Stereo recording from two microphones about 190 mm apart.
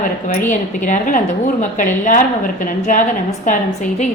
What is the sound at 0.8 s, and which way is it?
Speech, 45° left (ahead or behind).